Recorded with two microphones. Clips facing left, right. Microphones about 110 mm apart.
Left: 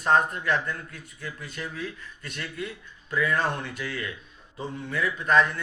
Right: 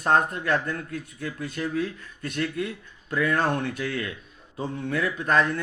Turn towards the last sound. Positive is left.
turn(degrees=-45)  # may be behind; listen again after turning